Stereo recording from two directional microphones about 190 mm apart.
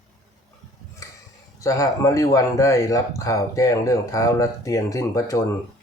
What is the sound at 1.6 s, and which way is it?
Speech, 15° left (ahead or behind).